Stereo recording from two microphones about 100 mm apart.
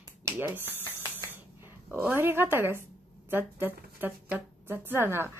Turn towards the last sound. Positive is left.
turn(degrees=-25)  # may be behind; listen again after turning